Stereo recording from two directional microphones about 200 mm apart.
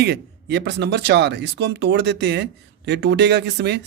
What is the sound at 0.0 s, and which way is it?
Speech, 55° right (ahead or behind).